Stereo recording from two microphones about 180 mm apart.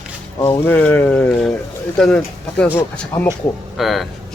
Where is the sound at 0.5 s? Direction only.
10° left (ahead or behind).